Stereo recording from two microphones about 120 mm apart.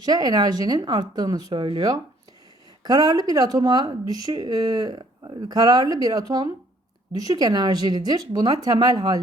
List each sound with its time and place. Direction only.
0.0 s speech: 35° right (ahead or behind)